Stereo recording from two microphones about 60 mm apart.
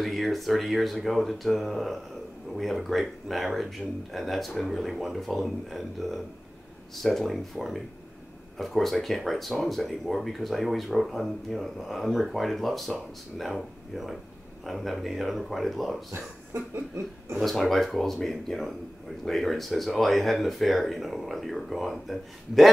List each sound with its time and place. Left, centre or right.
0.0 s speech: centre
16.1 s speech: right
17.4 s speech: centre